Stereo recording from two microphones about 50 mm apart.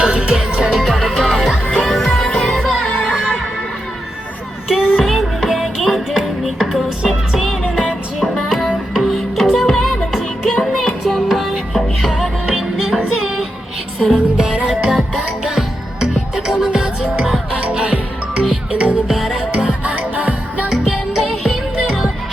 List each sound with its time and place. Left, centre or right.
0.0 s music: centre
0.8 s music: centre
2.6 s music: centre
2.8 s music: centre
4.9 s music: centre
14.3 s music: centre
14.7 s music: centre; by 18.9 s right
19.0 s music: centre
19.5 s music: right
20.7 s music: centre